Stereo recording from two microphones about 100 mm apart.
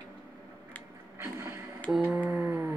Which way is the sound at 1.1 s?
30° right (ahead or behind).